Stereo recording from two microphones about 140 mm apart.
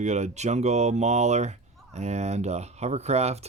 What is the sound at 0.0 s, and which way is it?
Speech, 55° right (ahead or behind).